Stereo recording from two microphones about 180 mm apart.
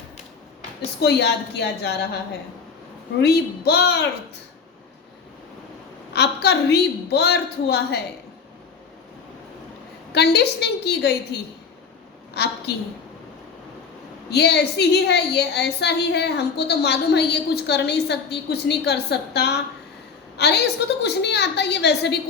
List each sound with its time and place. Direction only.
1.0 s a woman's voice: 70° left (ahead or behind)
3.2 s a woman's voice: 65° left (ahead or behind)
6.1 s a woman's voice: 65° left (ahead or behind)
10.1 s a woman's voice: 65° left (ahead or behind)
14.3 s a woman's voice: 65° left (ahead or behind)